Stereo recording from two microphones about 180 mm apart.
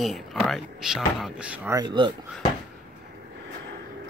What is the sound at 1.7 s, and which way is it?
Speech, 25° right (ahead or behind).